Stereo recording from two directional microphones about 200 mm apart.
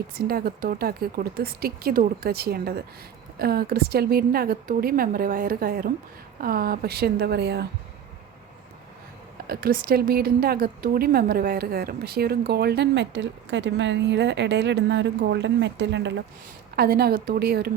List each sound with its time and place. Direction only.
0.1 s a woman's voice: 50° right (ahead or behind)
9.5 s a woman's voice: 50° right (ahead or behind)